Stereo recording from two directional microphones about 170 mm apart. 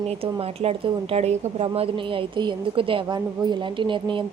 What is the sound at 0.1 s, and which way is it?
A woman's voice, 35° right (ahead or behind).